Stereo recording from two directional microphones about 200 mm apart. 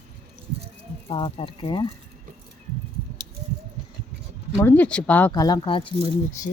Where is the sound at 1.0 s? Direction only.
25° left (ahead or behind).